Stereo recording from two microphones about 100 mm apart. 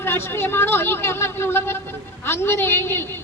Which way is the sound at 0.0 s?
25° left (ahead or behind).